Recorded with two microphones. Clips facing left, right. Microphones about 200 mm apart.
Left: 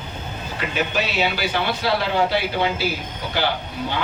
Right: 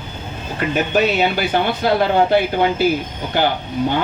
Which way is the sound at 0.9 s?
50° right (ahead or behind).